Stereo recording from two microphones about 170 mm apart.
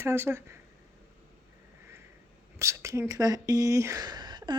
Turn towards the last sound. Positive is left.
turn(degrees=-25)  # may be behind; listen again after turning